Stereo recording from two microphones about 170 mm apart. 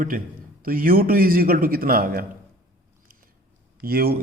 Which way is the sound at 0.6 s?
55° right (ahead or behind).